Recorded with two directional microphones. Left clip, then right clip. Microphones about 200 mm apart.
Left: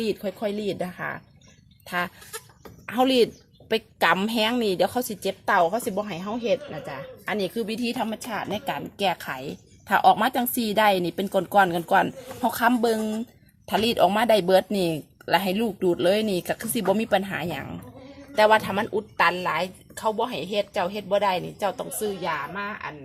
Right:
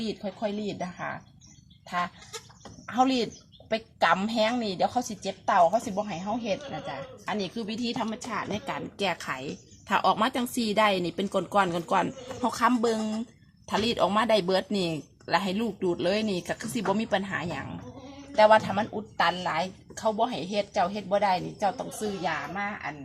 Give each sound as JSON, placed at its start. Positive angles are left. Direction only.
{"t": 0.0, "sound": "speech", "side_deg": 50}
{"t": 1.9, "sound": "a woman's voice", "side_deg": 50}